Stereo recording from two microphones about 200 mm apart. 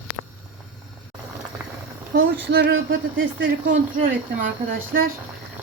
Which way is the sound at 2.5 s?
55° right (ahead or behind).